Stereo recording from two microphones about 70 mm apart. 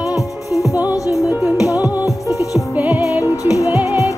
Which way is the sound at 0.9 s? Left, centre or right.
Left.